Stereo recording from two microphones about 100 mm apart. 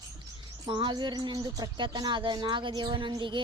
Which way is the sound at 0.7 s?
55° right (ahead or behind).